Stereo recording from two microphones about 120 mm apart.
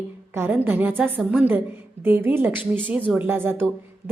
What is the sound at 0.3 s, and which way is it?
A woman's voice, 20° right (ahead or behind).